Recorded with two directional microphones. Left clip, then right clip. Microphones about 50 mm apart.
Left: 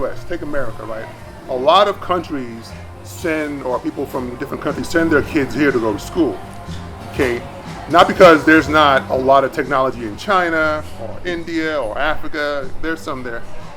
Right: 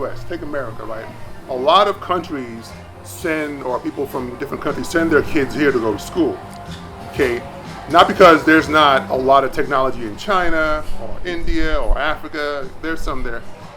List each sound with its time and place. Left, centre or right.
0.0 s speech: centre